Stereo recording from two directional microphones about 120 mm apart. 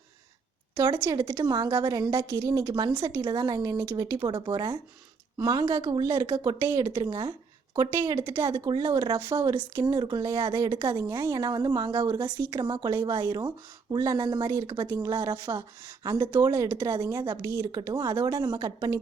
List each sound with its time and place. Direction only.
1.0 s a woman's voice: 25° right (ahead or behind)
4.2 s a woman's voice: 35° right (ahead or behind)